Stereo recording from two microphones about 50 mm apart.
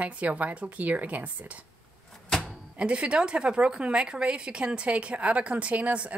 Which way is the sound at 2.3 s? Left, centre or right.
Centre.